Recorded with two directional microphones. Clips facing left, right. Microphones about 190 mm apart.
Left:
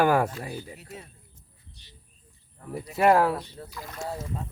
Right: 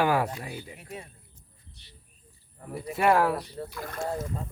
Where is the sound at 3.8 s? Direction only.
55° right (ahead or behind).